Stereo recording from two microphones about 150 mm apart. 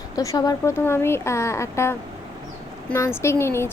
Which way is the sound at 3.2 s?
15° left (ahead or behind).